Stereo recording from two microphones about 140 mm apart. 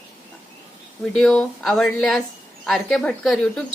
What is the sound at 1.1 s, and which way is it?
A woman's voice, 5° left (ahead or behind).